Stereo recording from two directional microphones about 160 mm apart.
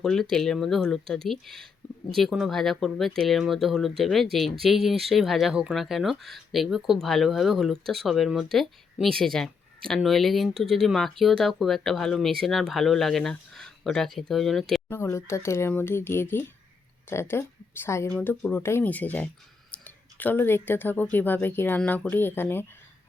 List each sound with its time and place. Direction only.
0.0 s speech: 5° left (ahead or behind)
14.8 s speech: 15° left (ahead or behind)